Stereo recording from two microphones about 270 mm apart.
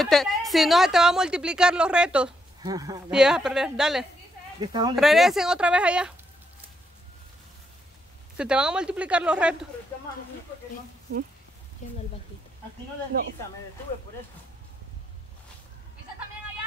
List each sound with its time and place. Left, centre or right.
0.0 s a woman's voice: centre
4.6 s speech: centre
4.9 s a woman's voice: centre
8.4 s a woman's voice: centre
11.8 s a sound: left